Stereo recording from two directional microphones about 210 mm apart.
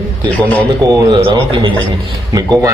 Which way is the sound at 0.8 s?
15° right (ahead or behind).